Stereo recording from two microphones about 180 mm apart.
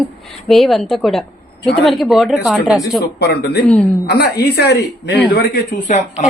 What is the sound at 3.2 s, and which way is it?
Speech, 65° left (ahead or behind).